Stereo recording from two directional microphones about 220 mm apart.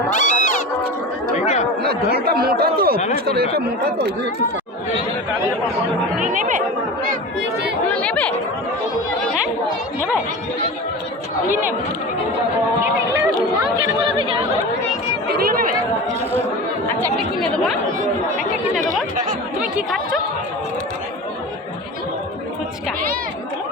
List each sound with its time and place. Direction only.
0.1 s cat: 35° left (ahead or behind)
1.8 s speech: 45° right (ahead or behind)
6.1 s speech: 35° right (ahead or behind)
7.9 s speech: 5° left (ahead or behind)
12.8 s speech: 10° right (ahead or behind)
14.1 s speech: 25° right (ahead or behind)
15.3 s chatter: 45° right (ahead or behind)
19.7 s a woman's voice: 5° right (ahead or behind)